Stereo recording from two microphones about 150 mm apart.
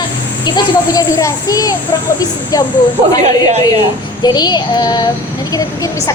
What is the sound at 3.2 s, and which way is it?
Speech, 50° right (ahead or behind).